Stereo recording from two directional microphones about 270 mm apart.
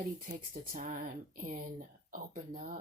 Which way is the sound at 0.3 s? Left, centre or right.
Right.